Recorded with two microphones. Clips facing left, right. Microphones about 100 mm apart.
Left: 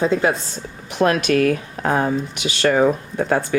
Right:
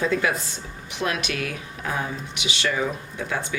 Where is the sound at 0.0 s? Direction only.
30° left (ahead or behind).